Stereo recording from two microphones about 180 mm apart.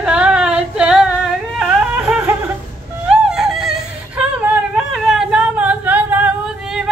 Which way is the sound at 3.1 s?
5° right (ahead or behind).